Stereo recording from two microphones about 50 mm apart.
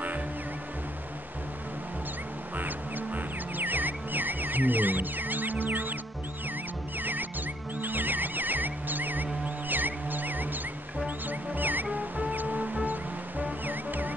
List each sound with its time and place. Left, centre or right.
2.5 s music: right
7.0 s music: right